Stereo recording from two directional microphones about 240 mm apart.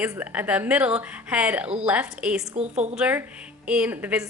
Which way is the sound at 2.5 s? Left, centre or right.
Right.